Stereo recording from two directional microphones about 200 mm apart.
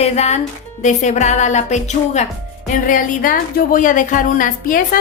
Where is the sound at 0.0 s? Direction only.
30° left (ahead or behind).